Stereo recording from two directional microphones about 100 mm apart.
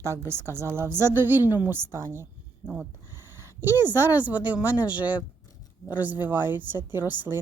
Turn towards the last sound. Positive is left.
turn(degrees=-20)  # may be behind; listen again after turning